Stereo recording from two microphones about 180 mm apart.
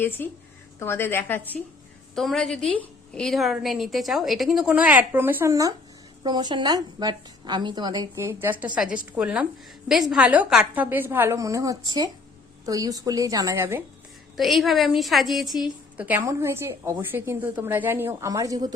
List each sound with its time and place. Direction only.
0.2 s a woman's voice: 10° left (ahead or behind); by 13.8 s 15° right (ahead or behind)
14.3 s a woman's voice: centre (ahead or behind); by 18.7 s 20° right (ahead or behind)